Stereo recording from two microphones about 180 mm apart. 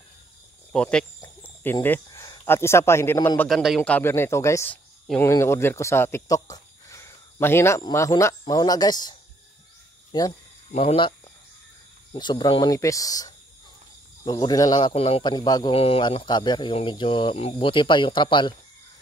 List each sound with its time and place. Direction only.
0.7 s speech: 5° left (ahead or behind)
3.4 s speech: centre (ahead or behind); by 9.1 s 20° left (ahead or behind)
10.1 s speech: 25° left (ahead or behind)
10.7 s speech: 35° left (ahead or behind)